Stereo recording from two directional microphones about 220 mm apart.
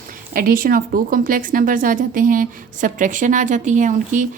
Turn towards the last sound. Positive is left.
turn(degrees=-35)  # may be behind; listen again after turning